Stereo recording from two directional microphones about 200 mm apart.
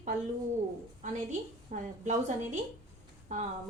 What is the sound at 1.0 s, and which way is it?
A woman's voice, 40° right (ahead or behind).